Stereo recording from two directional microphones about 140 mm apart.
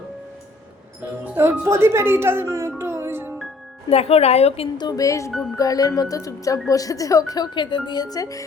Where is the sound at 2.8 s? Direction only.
15° right (ahead or behind).